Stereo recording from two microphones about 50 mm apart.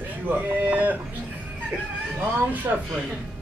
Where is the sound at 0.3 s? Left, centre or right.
Right.